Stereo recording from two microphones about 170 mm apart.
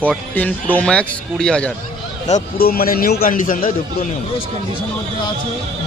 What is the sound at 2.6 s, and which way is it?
A man's voice, 60° left (ahead or behind).